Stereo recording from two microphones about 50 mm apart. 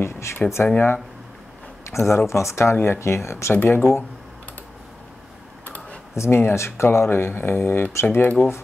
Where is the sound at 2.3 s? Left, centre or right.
Left.